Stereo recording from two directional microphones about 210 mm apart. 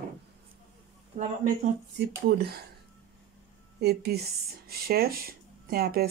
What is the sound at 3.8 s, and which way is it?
Speech, 50° right (ahead or behind).